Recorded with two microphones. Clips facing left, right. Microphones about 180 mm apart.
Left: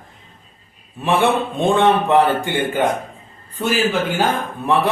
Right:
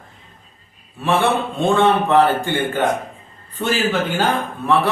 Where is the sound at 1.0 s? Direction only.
20° left (ahead or behind).